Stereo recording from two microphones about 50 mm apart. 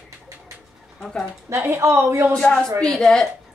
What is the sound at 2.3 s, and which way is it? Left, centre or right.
A woman's voice, centre.